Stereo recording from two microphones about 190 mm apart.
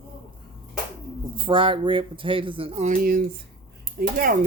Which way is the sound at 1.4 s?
25° right (ahead or behind).